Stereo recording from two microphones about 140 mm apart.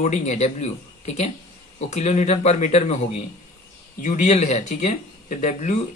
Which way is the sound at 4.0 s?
55° left (ahead or behind).